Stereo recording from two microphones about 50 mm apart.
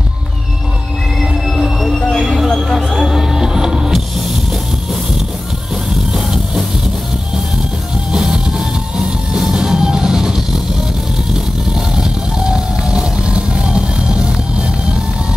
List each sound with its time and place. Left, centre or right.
1.2 s music: centre
2.0 s vehicle: left
2.2 s a sound: centre
2.7 s music: centre
6.1 s music: centre
8.1 s music: centre
11.9 s vehicle: centre